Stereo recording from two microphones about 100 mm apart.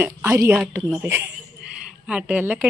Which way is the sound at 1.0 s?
20° right (ahead or behind).